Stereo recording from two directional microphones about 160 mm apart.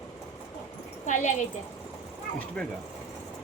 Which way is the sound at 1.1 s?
50° left (ahead or behind).